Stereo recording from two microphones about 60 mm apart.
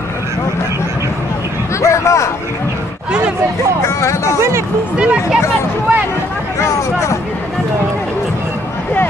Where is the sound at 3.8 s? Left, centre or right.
Left.